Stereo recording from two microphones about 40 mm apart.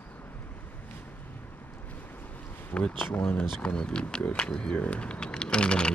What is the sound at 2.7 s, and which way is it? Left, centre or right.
Speech, left.